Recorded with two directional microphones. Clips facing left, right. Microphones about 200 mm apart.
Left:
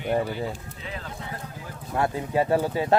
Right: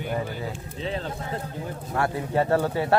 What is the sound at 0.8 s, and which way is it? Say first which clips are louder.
Speech: right 7 dB; 30° right (ahead or behind).